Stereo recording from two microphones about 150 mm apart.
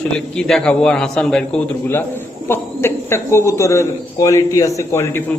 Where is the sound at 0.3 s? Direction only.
5° left (ahead or behind).